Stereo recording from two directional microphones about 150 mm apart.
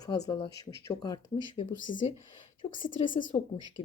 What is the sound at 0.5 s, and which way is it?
A woman's voice, 25° left (ahead or behind).